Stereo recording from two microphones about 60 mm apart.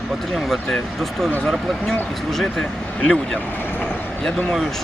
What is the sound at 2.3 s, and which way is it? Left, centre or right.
Speech, centre.